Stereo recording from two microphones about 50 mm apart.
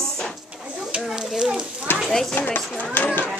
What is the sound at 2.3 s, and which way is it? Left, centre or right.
Speech, left.